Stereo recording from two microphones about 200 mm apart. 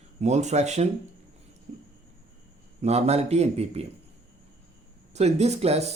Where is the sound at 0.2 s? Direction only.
35° right (ahead or behind).